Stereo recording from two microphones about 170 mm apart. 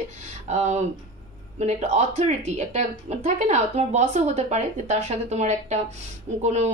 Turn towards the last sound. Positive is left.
turn(degrees=-40)  # may be behind; listen again after turning